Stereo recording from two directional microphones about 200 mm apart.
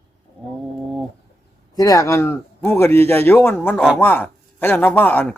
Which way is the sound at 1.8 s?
15° left (ahead or behind).